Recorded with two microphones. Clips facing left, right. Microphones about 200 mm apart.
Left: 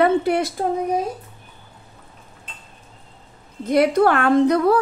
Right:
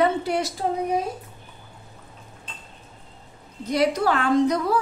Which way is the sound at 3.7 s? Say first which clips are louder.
Left 5 dB; 55° left (ahead or behind).